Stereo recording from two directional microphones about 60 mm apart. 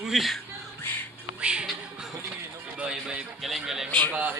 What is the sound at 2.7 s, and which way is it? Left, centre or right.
Music, centre.